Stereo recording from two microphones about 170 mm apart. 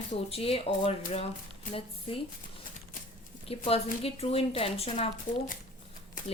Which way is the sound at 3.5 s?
35° left (ahead or behind).